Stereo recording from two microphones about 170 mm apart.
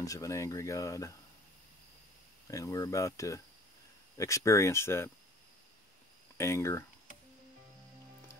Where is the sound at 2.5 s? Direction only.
20° left (ahead or behind).